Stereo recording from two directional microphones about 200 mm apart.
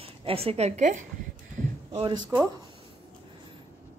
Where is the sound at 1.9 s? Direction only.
25° right (ahead or behind).